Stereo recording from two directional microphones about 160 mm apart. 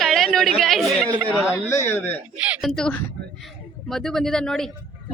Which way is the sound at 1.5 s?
15° left (ahead or behind).